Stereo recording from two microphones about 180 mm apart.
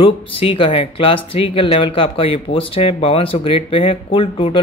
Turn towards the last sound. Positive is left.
turn(degrees=30)  # may be behind; listen again after turning